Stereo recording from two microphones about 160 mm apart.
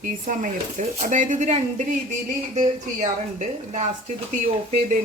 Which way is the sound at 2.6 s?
50° right (ahead or behind).